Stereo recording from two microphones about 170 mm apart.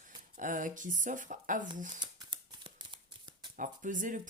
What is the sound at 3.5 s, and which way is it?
Speech, 50° right (ahead or behind).